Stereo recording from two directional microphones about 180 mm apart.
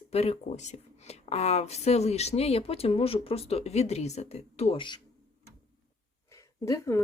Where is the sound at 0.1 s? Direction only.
35° left (ahead or behind).